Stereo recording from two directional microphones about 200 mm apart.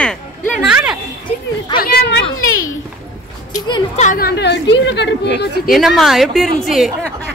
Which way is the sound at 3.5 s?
20° left (ahead or behind).